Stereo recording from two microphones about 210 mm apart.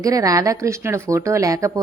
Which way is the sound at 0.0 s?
15° right (ahead or behind).